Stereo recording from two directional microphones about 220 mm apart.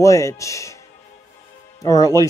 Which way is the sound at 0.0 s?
15° left (ahead or behind).